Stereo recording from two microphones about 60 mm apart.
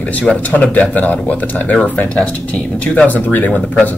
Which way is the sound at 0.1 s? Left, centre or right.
Left.